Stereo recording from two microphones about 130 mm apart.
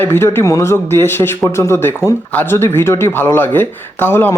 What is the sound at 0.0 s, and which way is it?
Speech, 20° left (ahead or behind).